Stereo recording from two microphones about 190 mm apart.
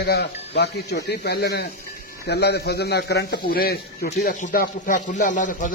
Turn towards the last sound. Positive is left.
turn(degrees=40)  # may be behind; listen again after turning